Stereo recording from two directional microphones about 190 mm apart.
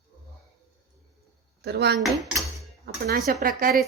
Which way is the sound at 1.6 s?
60° right (ahead or behind).